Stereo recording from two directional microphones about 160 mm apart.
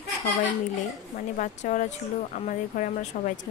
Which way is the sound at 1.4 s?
50° left (ahead or behind).